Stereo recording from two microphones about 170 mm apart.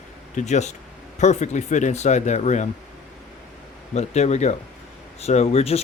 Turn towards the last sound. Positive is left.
turn(degrees=35)  # may be behind; listen again after turning